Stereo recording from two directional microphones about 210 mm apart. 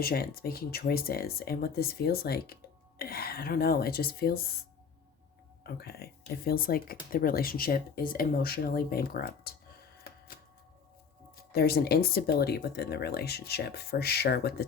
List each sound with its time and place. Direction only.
0.0 s speech: 45° left (ahead or behind)
5.6 s speech: 50° left (ahead or behind)
11.5 s speech: 50° left (ahead or behind)